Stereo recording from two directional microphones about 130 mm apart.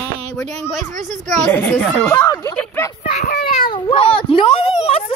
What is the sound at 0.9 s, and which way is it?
Speech, 75° right (ahead or behind).